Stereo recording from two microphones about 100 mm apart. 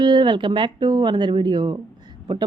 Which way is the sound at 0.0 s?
50° right (ahead or behind).